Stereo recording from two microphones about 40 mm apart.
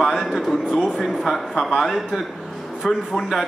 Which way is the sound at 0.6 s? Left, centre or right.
Centre.